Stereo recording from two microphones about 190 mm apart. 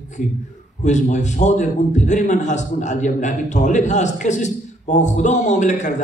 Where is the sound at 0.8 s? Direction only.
40° left (ahead or behind).